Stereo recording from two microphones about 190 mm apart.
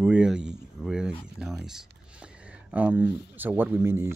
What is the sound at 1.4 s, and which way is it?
Speech, centre (ahead or behind).